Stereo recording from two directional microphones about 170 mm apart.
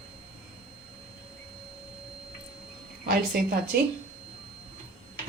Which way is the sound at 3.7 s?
65° right (ahead or behind).